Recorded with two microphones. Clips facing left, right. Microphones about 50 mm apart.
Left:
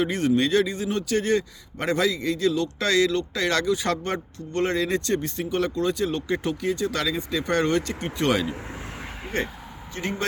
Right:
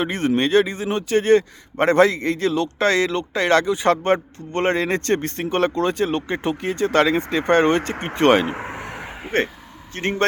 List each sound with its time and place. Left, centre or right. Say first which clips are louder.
0.0 s a man's voice: right 2 dB; right